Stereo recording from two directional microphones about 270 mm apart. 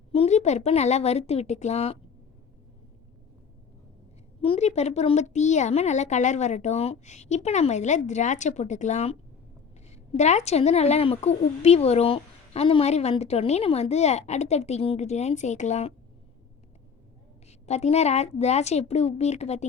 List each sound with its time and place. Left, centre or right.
0.1 s a woman's voice: left
4.4 s a woman's voice: left
17.7 s a woman's voice: left